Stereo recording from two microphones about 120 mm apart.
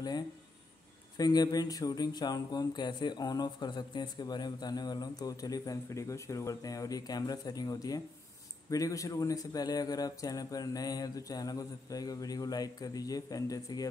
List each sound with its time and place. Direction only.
1.1 s speech: 35° left (ahead or behind)